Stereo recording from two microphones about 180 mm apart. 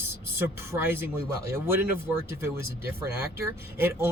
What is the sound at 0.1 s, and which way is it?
Speech, 15° right (ahead or behind).